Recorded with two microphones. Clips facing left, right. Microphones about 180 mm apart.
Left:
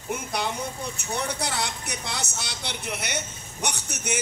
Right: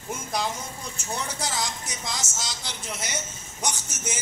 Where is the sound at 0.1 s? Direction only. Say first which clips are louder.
Left 1 dB; 65° left (ahead or behind).